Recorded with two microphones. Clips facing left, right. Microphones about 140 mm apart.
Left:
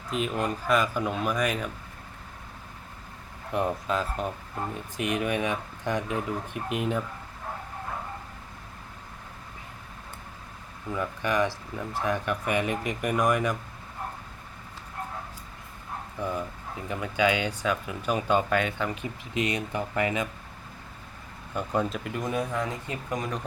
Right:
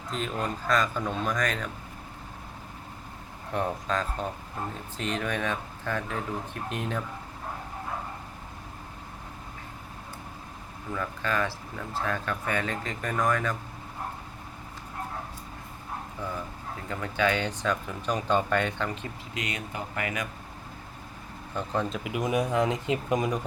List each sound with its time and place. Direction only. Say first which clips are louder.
0.1 s speech: left 3 dB; 10° left (ahead or behind)
3.5 s speech: left 2 dB; 10° left (ahead or behind)
10.9 s speech: left 3 dB; 15° left (ahead or behind)
16.2 s speech: left 6 dB; 20° left (ahead or behind)
19.4 s speech: left 6 dB; 30° left (ahead or behind)
21.5 s speech: left 2 dB; 10° left (ahead or behind)
21.9 s speech: right 2 dB; 5° right (ahead or behind)